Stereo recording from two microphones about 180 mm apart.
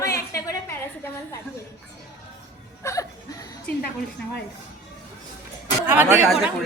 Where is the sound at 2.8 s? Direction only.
20° left (ahead or behind).